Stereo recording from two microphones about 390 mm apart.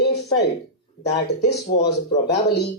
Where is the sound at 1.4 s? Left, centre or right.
Left.